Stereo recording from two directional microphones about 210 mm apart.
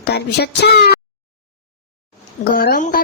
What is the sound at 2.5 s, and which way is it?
Speech, 45° left (ahead or behind).